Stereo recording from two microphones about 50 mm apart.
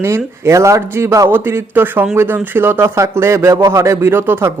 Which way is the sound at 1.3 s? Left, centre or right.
Right.